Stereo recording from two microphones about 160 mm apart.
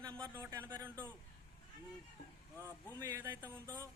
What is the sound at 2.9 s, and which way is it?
Speech, 15° right (ahead or behind).